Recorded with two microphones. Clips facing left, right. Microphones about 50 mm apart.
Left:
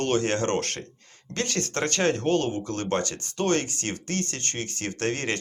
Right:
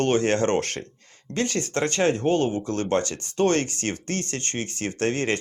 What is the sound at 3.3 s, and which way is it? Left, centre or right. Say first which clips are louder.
Speech: right 3 dB; right.